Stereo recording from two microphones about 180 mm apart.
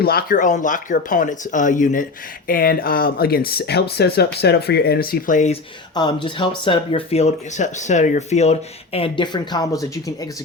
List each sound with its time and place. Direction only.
0.0 s speech: 60° left (ahead or behind)
5.9 s speech: 25° left (ahead or behind)